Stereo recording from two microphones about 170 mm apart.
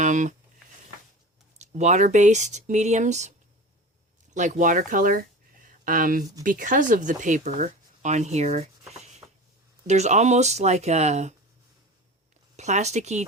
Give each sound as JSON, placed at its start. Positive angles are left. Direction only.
{"t": 0.0, "sound": "speech", "side_deg": -45}
{"t": 1.5, "sound": "speech", "side_deg": -40}
{"t": 4.4, "sound": "speech", "side_deg": -45}
{"t": 5.6, "sound": "a sound", "side_deg": -55}
{"t": 6.4, "sound": "speech", "side_deg": -50}
{"t": 9.8, "sound": "speech", "side_deg": -40}
{"t": 12.5, "sound": "speech", "side_deg": -40}